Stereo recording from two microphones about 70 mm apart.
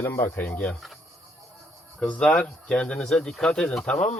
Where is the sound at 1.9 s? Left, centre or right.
Centre.